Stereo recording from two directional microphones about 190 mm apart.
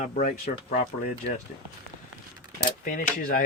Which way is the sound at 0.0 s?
40° left (ahead or behind).